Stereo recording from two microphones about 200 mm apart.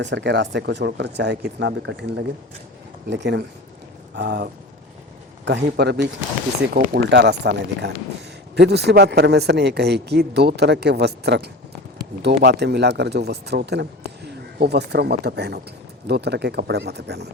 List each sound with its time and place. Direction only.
0.0 s a man's voice: 60° right (ahead or behind)
5.5 s a man's voice: 55° right (ahead or behind)